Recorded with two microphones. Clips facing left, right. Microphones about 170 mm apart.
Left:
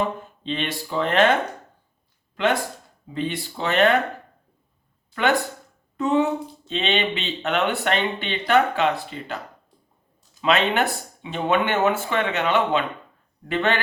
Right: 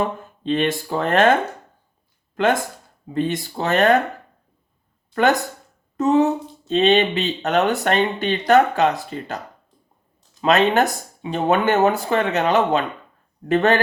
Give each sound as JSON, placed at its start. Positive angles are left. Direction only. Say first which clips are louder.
{"t": 0.0, "sound": "speech", "louder": "right 2 dB", "side_deg": -45}
{"t": 2.3, "sound": "speech", "louder": "right 3 dB", "side_deg": -45}
{"t": 5.1, "sound": "speech", "louder": "right 3 dB", "side_deg": -40}
{"t": 10.4, "sound": "speech", "louder": "right 4 dB", "side_deg": -40}